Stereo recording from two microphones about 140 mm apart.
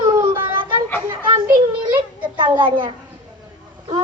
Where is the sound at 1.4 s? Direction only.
35° right (ahead or behind).